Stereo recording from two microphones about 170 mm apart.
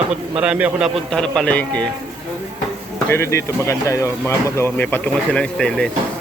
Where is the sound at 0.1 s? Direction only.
5° right (ahead or behind).